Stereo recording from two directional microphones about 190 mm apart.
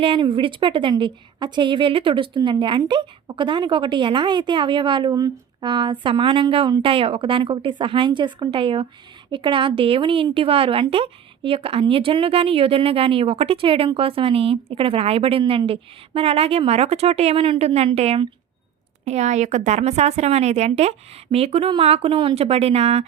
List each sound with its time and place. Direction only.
0.0 s a woman's voice: 25° right (ahead or behind)